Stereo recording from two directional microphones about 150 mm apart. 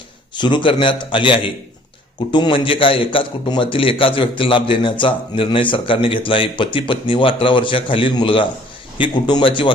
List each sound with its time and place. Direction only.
0.3 s a man's voice: 30° left (ahead or behind)